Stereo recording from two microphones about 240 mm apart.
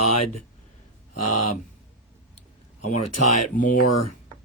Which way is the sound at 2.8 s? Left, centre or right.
Left.